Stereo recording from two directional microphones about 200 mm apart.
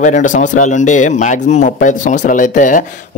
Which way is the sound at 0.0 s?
40° left (ahead or behind).